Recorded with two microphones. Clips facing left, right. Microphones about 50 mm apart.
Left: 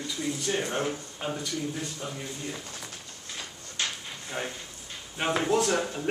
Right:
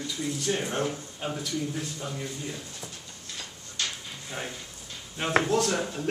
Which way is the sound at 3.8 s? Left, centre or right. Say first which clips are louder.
Left 1 dB; centre.